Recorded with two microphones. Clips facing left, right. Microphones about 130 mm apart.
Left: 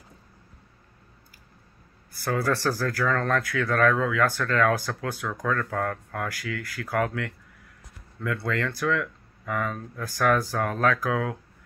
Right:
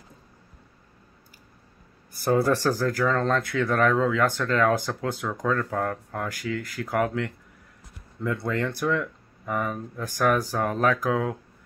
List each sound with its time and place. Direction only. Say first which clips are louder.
2.1 s speech: right 4 dB; 25° right (ahead or behind)